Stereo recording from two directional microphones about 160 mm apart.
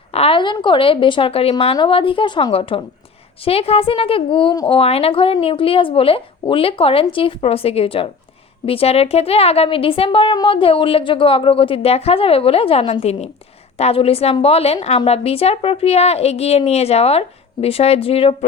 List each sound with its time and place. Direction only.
0.1 s a woman's voice: 35° left (ahead or behind)